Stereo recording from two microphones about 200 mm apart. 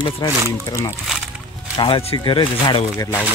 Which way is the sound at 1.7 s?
25° left (ahead or behind).